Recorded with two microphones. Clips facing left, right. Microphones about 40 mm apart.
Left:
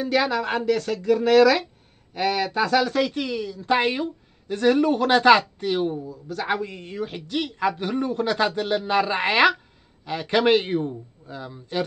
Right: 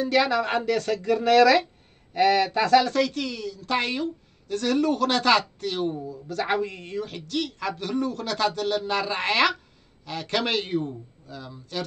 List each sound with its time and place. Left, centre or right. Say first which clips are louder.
0.0 s speech: even; centre
5.9 s speech: right 1 dB; centre; by 11.8 s left